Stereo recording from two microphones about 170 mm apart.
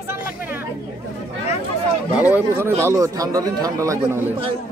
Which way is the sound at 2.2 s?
10° right (ahead or behind).